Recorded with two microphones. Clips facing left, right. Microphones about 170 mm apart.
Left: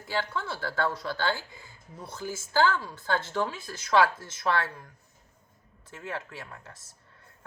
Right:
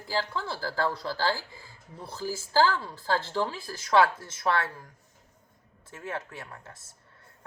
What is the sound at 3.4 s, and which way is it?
Speech, 20° left (ahead or behind).